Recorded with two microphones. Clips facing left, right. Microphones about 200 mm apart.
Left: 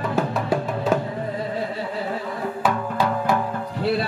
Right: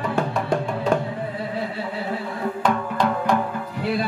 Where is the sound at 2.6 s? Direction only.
5° left (ahead or behind).